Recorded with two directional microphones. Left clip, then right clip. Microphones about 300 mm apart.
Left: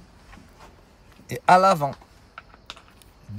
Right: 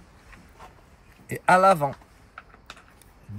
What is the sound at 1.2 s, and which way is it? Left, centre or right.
Speech, centre.